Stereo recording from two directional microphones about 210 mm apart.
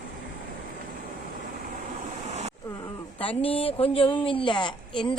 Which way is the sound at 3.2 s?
25° left (ahead or behind).